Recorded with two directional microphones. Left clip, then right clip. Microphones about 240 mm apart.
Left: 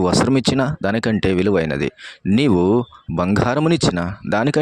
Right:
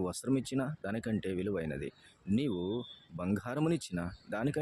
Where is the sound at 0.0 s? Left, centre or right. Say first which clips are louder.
Left 19 dB; left.